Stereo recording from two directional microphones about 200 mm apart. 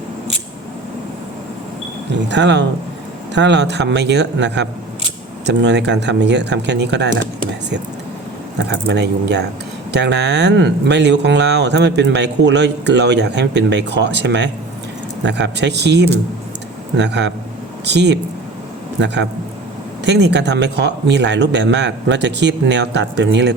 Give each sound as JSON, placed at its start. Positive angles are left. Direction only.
{"t": 2.3, "sound": "speech", "side_deg": -60}
{"t": 8.5, "sound": "speech", "side_deg": -60}